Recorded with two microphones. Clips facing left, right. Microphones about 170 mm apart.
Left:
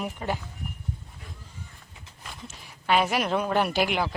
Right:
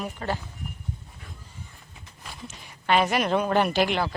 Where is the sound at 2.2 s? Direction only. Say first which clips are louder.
Right 1 dB; centre (ahead or behind).